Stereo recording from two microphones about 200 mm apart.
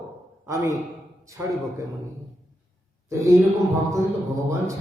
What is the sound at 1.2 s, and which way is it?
Speech, 15° right (ahead or behind).